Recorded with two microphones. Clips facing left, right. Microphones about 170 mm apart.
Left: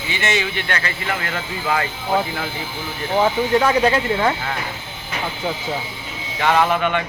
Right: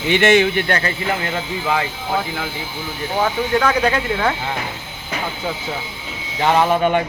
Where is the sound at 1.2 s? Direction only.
15° right (ahead or behind).